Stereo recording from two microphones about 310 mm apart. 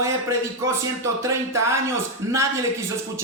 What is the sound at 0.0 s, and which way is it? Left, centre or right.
A man's voice, centre.